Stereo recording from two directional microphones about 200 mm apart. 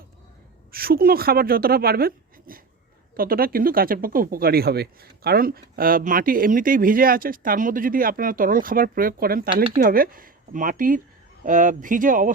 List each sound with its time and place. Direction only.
0.7 s speech: 50° right (ahead or behind)